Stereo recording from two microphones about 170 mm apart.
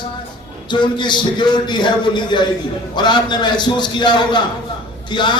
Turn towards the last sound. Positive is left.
turn(degrees=25)  # may be behind; listen again after turning